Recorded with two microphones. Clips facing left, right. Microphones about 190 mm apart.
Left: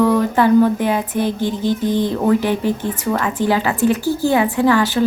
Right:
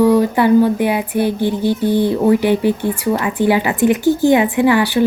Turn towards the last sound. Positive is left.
turn(degrees=-15)  # may be behind; listen again after turning